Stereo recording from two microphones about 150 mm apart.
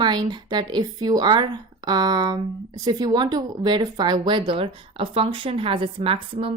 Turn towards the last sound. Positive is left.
turn(degrees=-35)  # may be behind; listen again after turning